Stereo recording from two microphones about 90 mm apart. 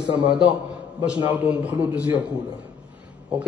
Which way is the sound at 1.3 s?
15° right (ahead or behind).